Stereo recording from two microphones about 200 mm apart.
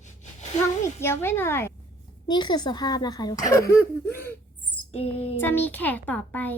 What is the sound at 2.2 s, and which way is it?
Speech, 20° left (ahead or behind).